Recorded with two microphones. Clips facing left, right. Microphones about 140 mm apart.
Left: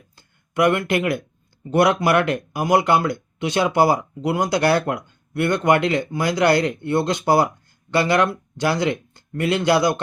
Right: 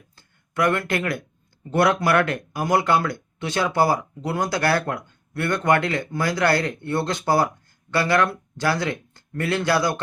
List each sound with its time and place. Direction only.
0.2 s speech: 15° left (ahead or behind)